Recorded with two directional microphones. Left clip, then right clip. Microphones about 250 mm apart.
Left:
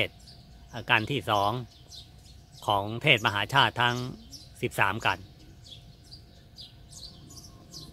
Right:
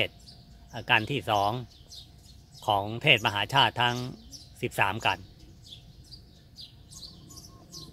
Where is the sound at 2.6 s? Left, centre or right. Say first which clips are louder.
Right 1 dB; centre.